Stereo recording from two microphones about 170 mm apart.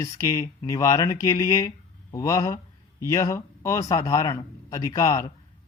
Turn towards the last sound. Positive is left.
turn(degrees=20)  # may be behind; listen again after turning